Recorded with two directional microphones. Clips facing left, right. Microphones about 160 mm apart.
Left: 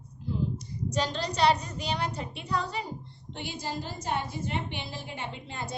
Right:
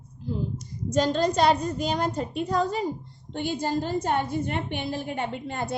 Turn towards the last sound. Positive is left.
turn(degrees=-55)  # may be behind; listen again after turning